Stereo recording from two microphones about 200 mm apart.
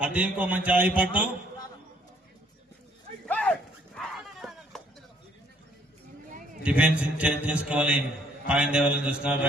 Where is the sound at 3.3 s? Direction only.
5° left (ahead or behind).